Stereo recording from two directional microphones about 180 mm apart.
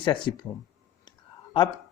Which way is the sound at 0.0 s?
25° left (ahead or behind).